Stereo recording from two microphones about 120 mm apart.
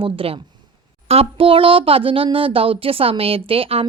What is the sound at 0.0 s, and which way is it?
A woman's voice, 50° right (ahead or behind).